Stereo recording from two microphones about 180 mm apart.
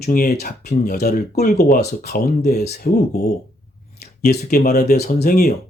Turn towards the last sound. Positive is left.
turn(degrees=60)  # may be behind; listen again after turning